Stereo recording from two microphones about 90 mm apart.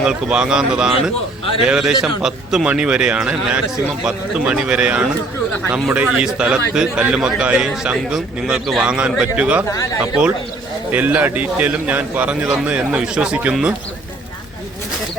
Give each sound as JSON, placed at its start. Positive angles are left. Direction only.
{"t": 0.0, "sound": "a man's voice", "side_deg": -10}
{"t": 9.7, "sound": "speech", "side_deg": 40}
{"t": 10.9, "sound": "a man's voice", "side_deg": -20}